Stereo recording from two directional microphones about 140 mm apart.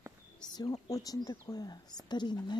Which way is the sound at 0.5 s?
30° left (ahead or behind).